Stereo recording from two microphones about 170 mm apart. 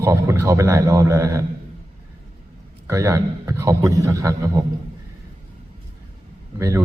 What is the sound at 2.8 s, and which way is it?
A man's voice, 15° right (ahead or behind).